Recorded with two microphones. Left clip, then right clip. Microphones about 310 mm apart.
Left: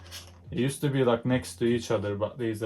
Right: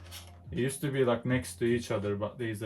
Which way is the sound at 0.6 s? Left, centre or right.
Centre.